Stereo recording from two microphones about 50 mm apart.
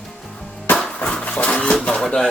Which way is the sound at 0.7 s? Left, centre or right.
Centre.